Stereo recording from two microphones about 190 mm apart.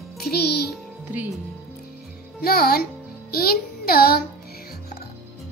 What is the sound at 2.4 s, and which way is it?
A child's voice, 50° left (ahead or behind).